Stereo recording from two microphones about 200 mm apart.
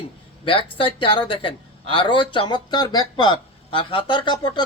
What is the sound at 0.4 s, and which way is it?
Speech, 25° left (ahead or behind).